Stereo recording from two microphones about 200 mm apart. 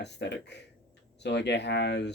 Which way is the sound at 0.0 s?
60° left (ahead or behind).